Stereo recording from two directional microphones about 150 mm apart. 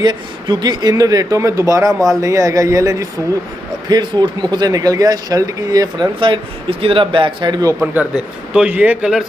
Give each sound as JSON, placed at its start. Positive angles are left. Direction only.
{"t": 0.0, "sound": "speech", "side_deg": -30}
{"t": 7.8, "sound": "a man's voice", "side_deg": -10}